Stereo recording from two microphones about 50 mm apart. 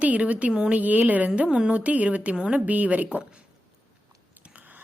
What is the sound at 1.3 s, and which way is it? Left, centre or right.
A woman's voice, right.